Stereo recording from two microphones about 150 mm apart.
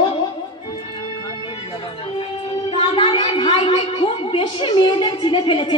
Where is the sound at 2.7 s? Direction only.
35° left (ahead or behind).